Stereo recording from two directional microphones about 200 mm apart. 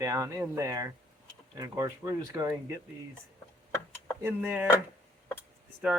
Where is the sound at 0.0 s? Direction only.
15° right (ahead or behind).